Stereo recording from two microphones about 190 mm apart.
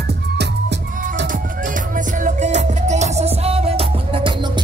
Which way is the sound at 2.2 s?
35° right (ahead or behind).